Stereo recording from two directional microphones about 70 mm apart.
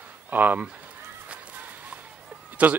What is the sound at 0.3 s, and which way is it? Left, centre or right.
Speech, right.